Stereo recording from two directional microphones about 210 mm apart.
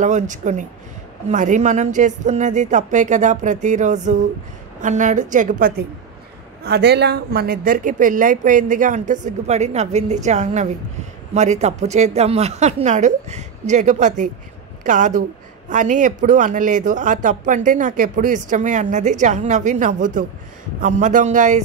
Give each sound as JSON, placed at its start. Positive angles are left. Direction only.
{"t": 0.0, "sound": "speech", "side_deg": -35}